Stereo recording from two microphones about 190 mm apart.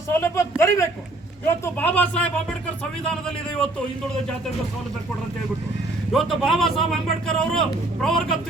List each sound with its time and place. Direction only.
0.2 s a sound: 15° left (ahead or behind)
1.5 s speech: 10° left (ahead or behind)
6.1 s speech: centre (ahead or behind)